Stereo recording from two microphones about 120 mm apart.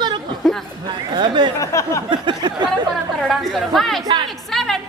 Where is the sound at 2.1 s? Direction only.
40° right (ahead or behind).